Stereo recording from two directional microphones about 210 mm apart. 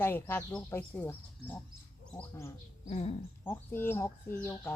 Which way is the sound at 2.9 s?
30° left (ahead or behind).